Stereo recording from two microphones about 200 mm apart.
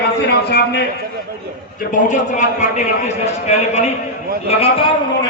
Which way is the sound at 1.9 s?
40° left (ahead or behind).